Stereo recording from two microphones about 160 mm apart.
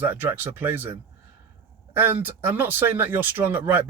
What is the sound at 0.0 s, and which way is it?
Speech, 10° right (ahead or behind).